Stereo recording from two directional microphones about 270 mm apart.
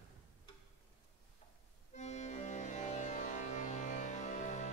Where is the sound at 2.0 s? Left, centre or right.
Left.